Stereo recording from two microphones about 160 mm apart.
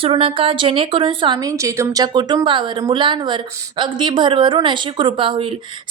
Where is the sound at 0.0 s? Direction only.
35° right (ahead or behind).